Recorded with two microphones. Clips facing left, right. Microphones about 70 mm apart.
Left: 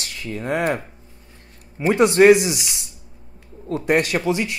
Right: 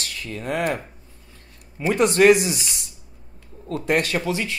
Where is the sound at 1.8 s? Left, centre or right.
Left.